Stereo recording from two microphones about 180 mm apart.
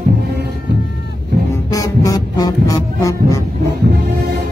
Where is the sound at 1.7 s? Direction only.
20° left (ahead or behind).